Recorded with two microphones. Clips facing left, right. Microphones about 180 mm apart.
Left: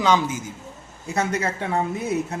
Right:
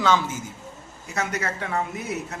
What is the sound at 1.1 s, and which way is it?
Speech, 25° left (ahead or behind).